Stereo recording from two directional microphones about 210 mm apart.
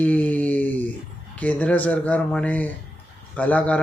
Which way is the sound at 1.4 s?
5° left (ahead or behind).